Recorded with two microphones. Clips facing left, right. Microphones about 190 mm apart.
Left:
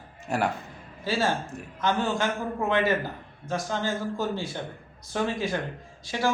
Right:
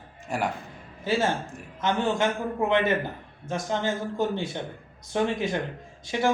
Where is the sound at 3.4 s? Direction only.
20° right (ahead or behind).